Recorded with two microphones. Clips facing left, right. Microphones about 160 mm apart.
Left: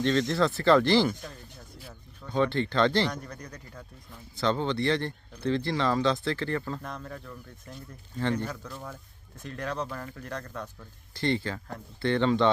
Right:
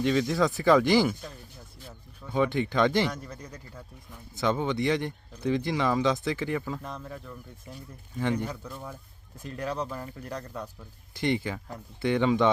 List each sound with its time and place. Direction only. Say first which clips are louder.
0.0 s speech: even; 10° right (ahead or behind)
3.1 s speech: even; 5° right (ahead or behind)